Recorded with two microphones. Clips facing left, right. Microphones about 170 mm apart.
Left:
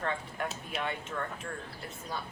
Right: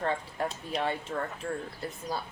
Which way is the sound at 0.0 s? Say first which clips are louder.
Right 4 dB; 30° right (ahead or behind).